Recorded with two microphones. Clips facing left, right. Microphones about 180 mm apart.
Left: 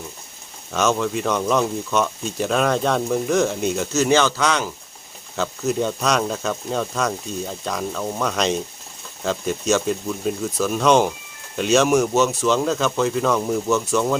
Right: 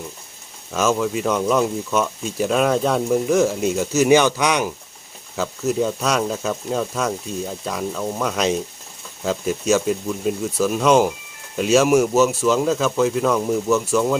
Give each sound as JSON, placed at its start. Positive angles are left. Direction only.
{"t": 0.7, "sound": "speech", "side_deg": -5}
{"t": 5.4, "sound": "speech", "side_deg": -5}